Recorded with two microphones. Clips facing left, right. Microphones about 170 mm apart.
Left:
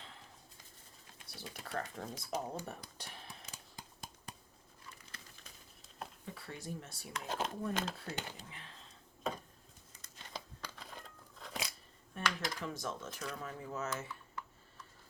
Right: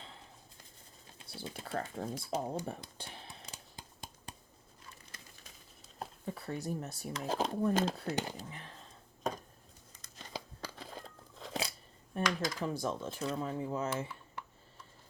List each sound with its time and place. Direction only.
1.3 s a sound: 30° right (ahead or behind)
6.0 s speech: 35° right (ahead or behind)
10.0 s crumpling: 35° right (ahead or behind)
11.3 s scissors: 30° right (ahead or behind)
12.1 s speech: 35° right (ahead or behind)